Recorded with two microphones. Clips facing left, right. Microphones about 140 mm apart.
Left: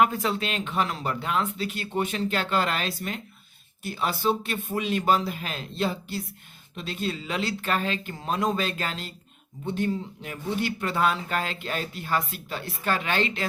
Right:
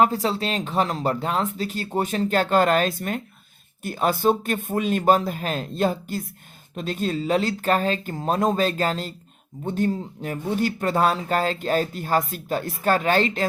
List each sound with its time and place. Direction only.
0.0 s speech: 35° right (ahead or behind)